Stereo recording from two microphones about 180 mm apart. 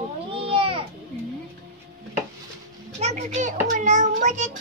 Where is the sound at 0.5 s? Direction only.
30° right (ahead or behind).